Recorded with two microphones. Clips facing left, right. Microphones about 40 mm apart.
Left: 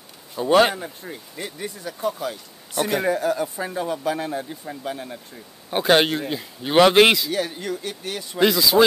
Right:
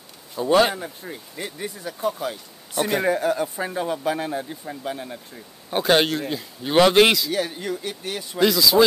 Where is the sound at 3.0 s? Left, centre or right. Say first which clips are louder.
Even; right; by 5.2 s centre.